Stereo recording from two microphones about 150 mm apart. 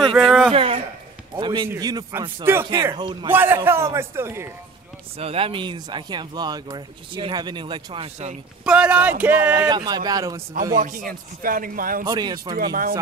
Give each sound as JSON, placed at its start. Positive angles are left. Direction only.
{"t": 0.0, "sound": "speech", "side_deg": 5}
{"t": 0.5, "sound": "speech", "side_deg": -40}
{"t": 3.3, "sound": "a man's voice", "side_deg": -15}
{"t": 5.1, "sound": "speech", "side_deg": -40}
{"t": 8.6, "sound": "a man's voice", "side_deg": -10}
{"t": 9.6, "sound": "speech", "side_deg": -30}
{"t": 10.8, "sound": "a man's voice", "side_deg": -65}
{"t": 12.0, "sound": "speech", "side_deg": -30}
{"t": 12.5, "sound": "a man's voice", "side_deg": -75}